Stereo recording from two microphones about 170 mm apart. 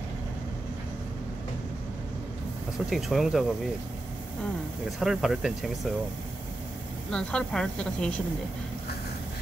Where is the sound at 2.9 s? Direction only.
Centre (ahead or behind).